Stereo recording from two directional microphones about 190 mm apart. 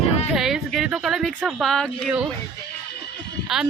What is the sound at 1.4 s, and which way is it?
Speech, centre (ahead or behind).